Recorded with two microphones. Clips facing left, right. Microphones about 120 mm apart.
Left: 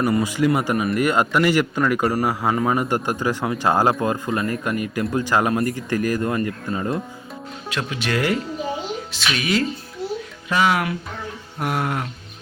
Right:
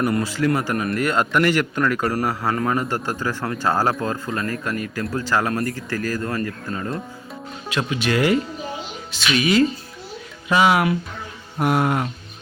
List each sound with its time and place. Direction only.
0.0 s speech: centre (ahead or behind)
0.3 s speech: 15° left (ahead or behind)
7.7 s speech: 5° right (ahead or behind)